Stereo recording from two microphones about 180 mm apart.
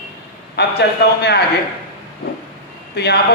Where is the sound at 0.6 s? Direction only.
65° left (ahead or behind).